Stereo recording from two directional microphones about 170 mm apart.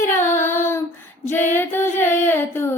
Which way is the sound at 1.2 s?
10° left (ahead or behind).